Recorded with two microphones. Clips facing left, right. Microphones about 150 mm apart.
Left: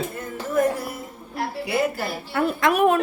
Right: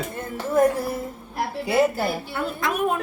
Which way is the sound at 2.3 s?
75° left (ahead or behind).